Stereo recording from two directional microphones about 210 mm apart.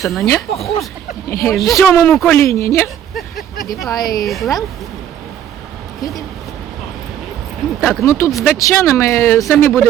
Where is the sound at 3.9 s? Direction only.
20° left (ahead or behind).